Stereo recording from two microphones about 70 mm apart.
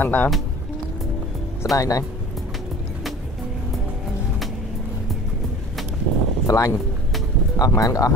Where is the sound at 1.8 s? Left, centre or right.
Left.